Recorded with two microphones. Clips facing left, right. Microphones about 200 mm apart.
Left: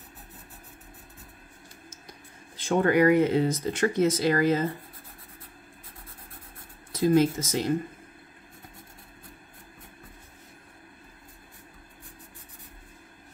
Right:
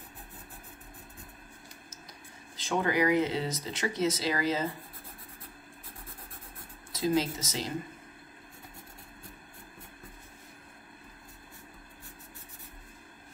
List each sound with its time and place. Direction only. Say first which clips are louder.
2.5 s speech: left 6 dB; 55° left (ahead or behind)
6.9 s speech: left 7 dB; 50° left (ahead or behind)